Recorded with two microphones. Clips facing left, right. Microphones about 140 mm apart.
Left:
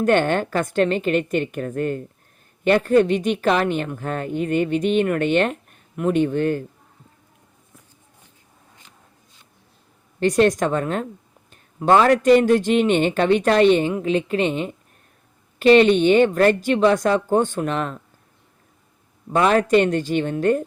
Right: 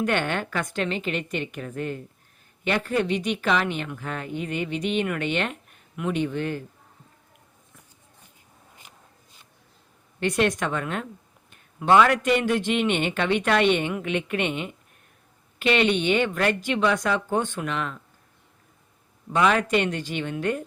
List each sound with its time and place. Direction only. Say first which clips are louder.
0.0 s a woman's voice: left 7 dB; 45° left (ahead or behind)
8.8 s a sound: right 1 dB; 15° right (ahead or behind)
10.2 s a man's voice: left 6 dB; 40° left (ahead or behind)
19.3 s a woman's voice: left 5 dB; 40° left (ahead or behind)